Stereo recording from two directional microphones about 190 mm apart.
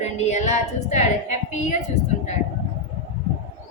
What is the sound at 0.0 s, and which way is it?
Female singing, 35° left (ahead or behind).